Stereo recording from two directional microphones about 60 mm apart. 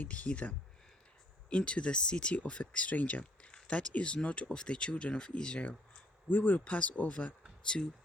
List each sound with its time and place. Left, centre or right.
0.0 s speech: left
6.2 s speech: left